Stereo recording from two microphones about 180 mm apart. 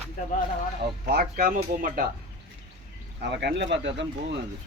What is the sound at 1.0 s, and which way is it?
Speech, 55° right (ahead or behind).